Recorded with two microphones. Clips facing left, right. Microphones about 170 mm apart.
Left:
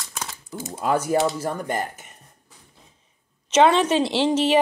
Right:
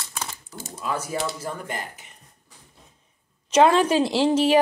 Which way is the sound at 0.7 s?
60° left (ahead or behind).